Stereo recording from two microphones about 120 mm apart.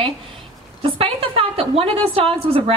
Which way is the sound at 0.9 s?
50° right (ahead or behind).